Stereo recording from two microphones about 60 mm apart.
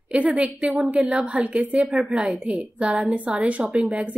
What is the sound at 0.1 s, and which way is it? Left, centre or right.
A woman's voice, right.